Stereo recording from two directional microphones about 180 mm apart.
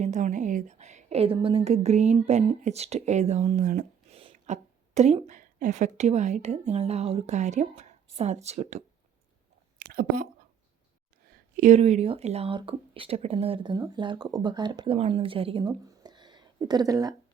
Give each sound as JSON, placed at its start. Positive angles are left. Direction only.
{"t": 0.0, "sound": "a woman's voice", "side_deg": -45}
{"t": 9.7, "sound": "speech", "side_deg": -55}
{"t": 11.5, "sound": "speech", "side_deg": -40}